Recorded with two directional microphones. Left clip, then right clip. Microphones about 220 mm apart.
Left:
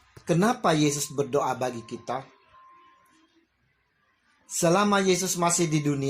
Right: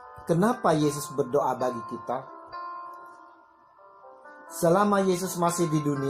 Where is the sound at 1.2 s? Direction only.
35° left (ahead or behind).